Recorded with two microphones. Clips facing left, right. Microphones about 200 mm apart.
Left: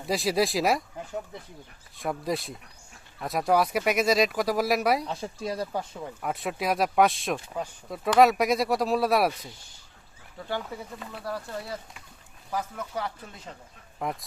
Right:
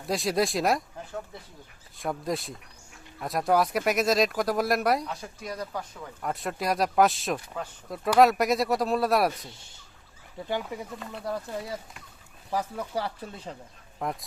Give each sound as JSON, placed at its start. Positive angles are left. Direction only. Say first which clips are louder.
{"t": 0.0, "sound": "speech", "louder": "left 1 dB", "side_deg": 0}
{"t": 2.0, "sound": "speech", "louder": "left 1 dB", "side_deg": 0}
{"t": 5.0, "sound": "speech", "louder": "left 4 dB", "side_deg": 30}
{"t": 6.2, "sound": "speech", "louder": "even", "side_deg": 0}
{"t": 10.3, "sound": "speech", "louder": "right 2 dB", "side_deg": -15}
{"t": 12.5, "sound": "speech", "louder": "right 2 dB", "side_deg": -30}
{"t": 14.0, "sound": "speech", "louder": "even", "side_deg": 0}